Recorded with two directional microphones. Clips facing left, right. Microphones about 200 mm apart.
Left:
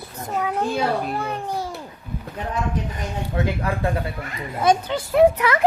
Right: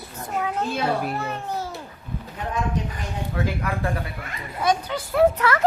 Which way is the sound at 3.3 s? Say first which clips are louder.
Left 3 dB; 25° left (ahead or behind).